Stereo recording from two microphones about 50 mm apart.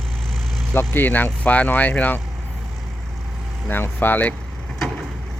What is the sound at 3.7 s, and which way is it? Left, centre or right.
Speech, left.